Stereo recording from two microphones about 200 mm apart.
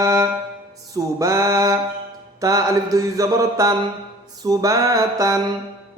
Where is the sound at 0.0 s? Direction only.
15° right (ahead or behind).